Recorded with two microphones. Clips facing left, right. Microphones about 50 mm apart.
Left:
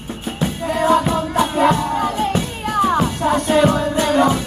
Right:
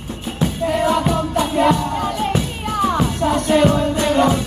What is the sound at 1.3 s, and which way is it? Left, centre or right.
Music, left.